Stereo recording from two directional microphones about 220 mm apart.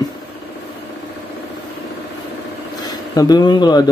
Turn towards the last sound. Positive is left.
turn(degrees=20)  # may be behind; listen again after turning